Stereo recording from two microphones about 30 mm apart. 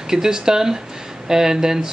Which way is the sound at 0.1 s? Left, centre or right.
Right.